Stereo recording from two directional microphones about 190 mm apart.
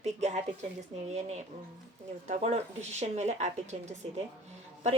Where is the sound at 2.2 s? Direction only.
35° right (ahead or behind).